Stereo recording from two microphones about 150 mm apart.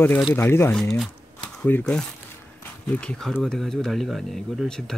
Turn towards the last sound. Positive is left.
turn(degrees=0)  # may be behind; listen again after turning